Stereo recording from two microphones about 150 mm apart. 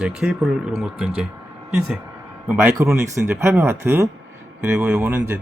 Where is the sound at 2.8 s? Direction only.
20° right (ahead or behind).